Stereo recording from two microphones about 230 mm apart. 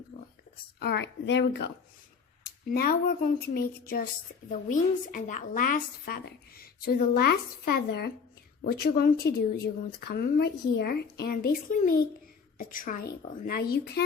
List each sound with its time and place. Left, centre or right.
0.8 s a woman's voice: left